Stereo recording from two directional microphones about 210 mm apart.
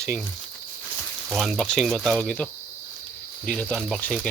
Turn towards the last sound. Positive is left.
turn(degrees=5)  # may be behind; listen again after turning